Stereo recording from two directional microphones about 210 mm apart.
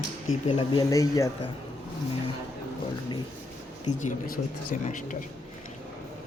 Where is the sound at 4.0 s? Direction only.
40° left (ahead or behind).